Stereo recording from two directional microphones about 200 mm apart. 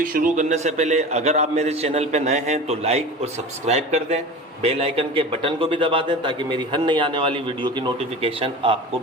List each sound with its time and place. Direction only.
0.0 s a man's voice: 40° right (ahead or behind)